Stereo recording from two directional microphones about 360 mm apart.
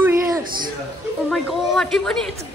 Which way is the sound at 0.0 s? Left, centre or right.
Centre.